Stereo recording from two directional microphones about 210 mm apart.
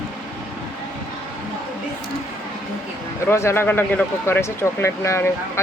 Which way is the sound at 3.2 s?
10° left (ahead or behind).